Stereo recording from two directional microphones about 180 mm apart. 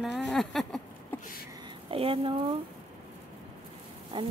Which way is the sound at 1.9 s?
30° right (ahead or behind).